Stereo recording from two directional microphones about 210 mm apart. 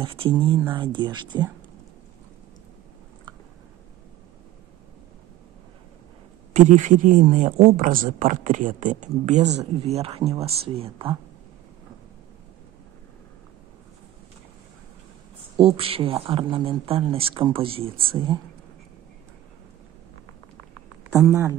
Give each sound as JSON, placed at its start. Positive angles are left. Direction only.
{"t": 0.0, "sound": "speech", "side_deg": -25}
{"t": 6.5, "sound": "speech", "side_deg": -35}
{"t": 15.5, "sound": "speech", "side_deg": -25}
{"t": 21.1, "sound": "speech", "side_deg": -15}